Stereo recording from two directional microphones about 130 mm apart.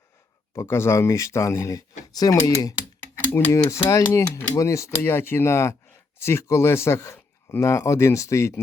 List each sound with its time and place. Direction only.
0.5 s speech: 20° left (ahead or behind)